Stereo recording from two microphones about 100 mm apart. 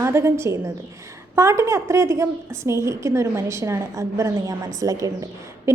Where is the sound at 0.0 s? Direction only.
25° right (ahead or behind).